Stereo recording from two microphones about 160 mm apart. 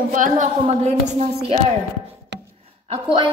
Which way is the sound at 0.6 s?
45° right (ahead or behind).